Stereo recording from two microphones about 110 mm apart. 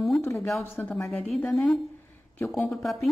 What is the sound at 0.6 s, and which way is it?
Speech, 20° left (ahead or behind).